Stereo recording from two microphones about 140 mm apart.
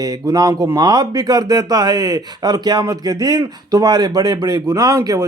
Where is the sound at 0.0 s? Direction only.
25° right (ahead or behind).